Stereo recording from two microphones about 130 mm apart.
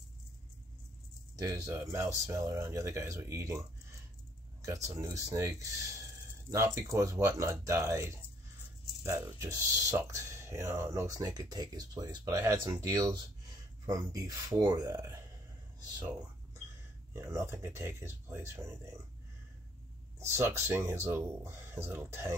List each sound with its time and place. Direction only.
1.4 s speech: 25° right (ahead or behind)
4.8 s speech: 25° right (ahead or behind)
17.1 s speech: 20° right (ahead or behind)
20.2 s speech: 20° right (ahead or behind)